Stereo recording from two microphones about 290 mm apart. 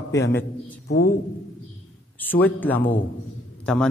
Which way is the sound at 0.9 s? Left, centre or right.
Left.